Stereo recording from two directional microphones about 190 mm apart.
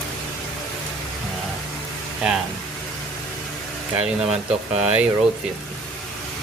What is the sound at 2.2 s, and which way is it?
Speech, 5° right (ahead or behind).